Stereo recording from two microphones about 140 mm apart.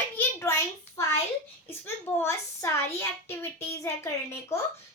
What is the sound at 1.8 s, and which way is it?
A child's voice, 15° left (ahead or behind).